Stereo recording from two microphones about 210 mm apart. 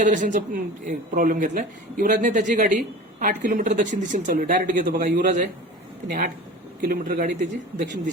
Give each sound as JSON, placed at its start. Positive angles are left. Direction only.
{"t": 0.1, "sound": "speech", "side_deg": -35}
{"t": 6.8, "sound": "speech", "side_deg": -40}